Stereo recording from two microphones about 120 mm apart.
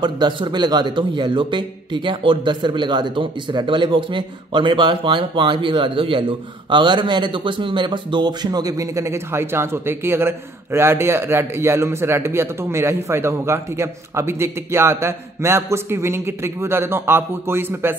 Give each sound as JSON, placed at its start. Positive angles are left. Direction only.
{"t": 0.0, "sound": "a man's voice", "side_deg": -40}